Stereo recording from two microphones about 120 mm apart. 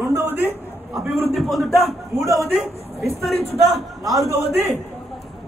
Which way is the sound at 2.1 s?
30° right (ahead or behind).